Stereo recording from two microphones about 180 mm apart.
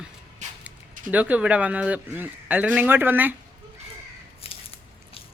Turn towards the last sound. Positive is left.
turn(degrees=30)  # may be behind; listen again after turning